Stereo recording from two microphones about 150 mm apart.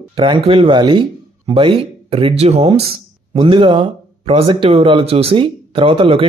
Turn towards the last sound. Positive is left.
turn(degrees=-35)  # may be behind; listen again after turning